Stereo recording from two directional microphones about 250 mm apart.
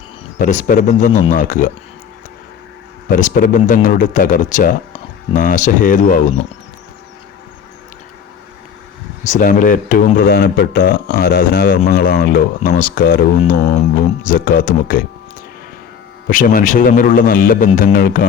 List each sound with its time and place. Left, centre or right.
0.3 s speech: left
3.1 s speech: left
9.2 s speech: left
16.2 s speech: left